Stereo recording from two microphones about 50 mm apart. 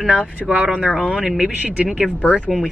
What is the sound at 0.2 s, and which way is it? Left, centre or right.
Speech, right.